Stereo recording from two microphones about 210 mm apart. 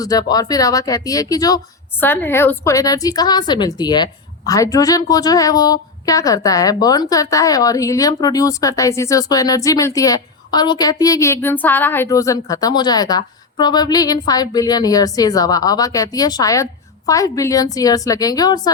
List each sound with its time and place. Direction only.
0.0 s speech: 20° left (ahead or behind)